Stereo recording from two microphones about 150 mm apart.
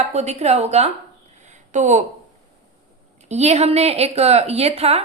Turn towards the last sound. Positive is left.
turn(degrees=-45)  # may be behind; listen again after turning